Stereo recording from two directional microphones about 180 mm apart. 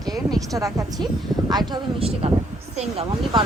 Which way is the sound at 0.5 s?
20° right (ahead or behind).